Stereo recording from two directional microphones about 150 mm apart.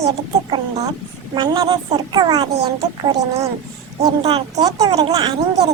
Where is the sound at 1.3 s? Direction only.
25° right (ahead or behind).